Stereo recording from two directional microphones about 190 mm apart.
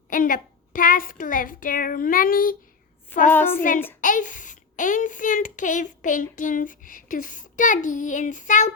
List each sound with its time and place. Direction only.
0.1 s a child's voice: 45° left (ahead or behind)
3.2 s a child's voice: 10° left (ahead or behind)
4.0 s a child's voice: 45° left (ahead or behind)